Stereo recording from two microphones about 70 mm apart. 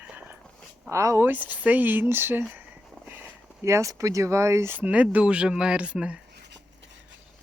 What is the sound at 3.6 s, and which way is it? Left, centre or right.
Speech, right.